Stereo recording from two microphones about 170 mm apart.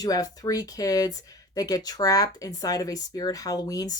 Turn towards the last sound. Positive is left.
turn(degrees=20)  # may be behind; listen again after turning